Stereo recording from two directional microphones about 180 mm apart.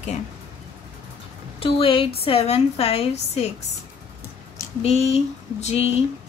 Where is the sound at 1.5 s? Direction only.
30° left (ahead or behind).